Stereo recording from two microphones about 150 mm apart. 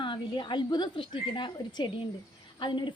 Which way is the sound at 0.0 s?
30° left (ahead or behind).